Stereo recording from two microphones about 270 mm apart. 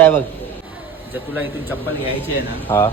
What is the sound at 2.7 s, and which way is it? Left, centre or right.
Speech, centre.